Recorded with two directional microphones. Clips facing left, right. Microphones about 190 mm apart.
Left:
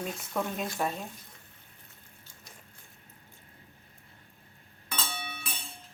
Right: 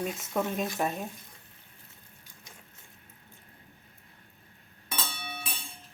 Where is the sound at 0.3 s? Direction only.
20° right (ahead or behind).